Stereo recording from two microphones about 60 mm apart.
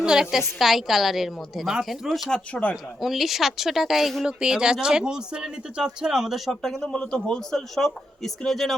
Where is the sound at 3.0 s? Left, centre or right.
Centre.